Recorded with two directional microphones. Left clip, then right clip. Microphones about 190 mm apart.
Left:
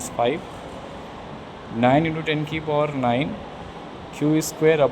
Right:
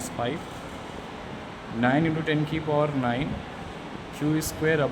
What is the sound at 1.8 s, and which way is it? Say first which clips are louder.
Speech: left 5 dB; 20° left (ahead or behind).